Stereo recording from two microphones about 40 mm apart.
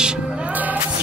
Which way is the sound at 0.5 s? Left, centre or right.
Right.